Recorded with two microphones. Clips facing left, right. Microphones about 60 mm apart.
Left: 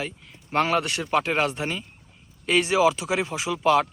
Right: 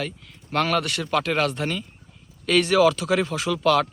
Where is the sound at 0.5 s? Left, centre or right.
Left.